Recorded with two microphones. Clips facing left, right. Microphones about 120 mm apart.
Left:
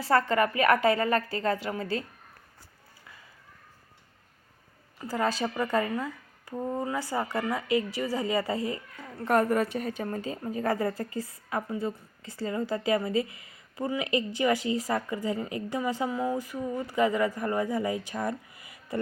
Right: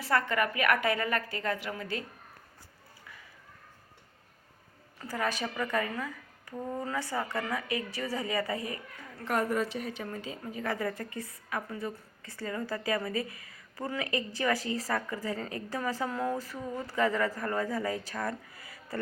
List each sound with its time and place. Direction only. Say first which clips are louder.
0.0 s a woman's voice: left 5 dB; 30° left (ahead or behind)
4.9 s a woman's voice: left 4 dB; 25° left (ahead or behind)
9.2 s a woman's voice: left 5 dB; 50° left (ahead or behind); by 16.0 s 20° left (ahead or behind)
16.0 s speech: left 3 dB; 10° left (ahead or behind)